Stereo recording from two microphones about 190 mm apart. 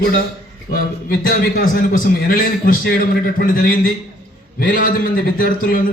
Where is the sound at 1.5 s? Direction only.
50° left (ahead or behind).